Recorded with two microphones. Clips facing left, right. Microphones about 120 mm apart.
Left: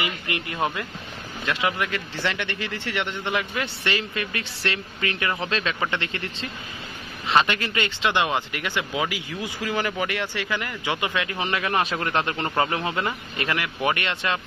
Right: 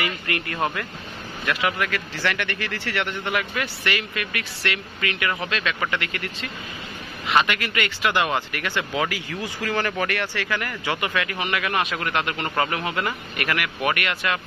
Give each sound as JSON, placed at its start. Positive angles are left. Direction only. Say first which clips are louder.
{"t": 0.0, "sound": "speech", "louder": "right 1 dB", "side_deg": 20}
{"t": 7.4, "sound": "speech", "louder": "even", "side_deg": 30}